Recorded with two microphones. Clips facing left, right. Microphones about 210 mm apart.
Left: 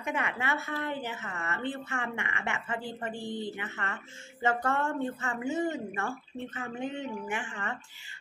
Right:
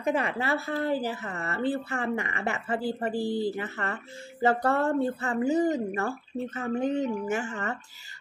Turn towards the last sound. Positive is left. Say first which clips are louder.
# right 6 dB
turn(degrees=-40)  # may be behind; listen again after turning